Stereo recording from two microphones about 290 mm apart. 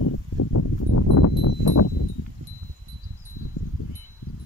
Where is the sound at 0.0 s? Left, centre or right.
Left.